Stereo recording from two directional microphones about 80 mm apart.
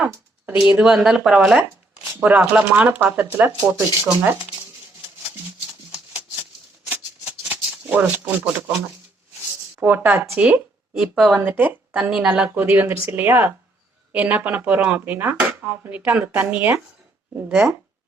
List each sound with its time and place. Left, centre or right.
0.7 s speech: centre
2.2 s speech: centre
3.7 s speech: right
6.8 s music: centre
9.8 s speech: right
11.3 s speech: right
11.9 s speech: centre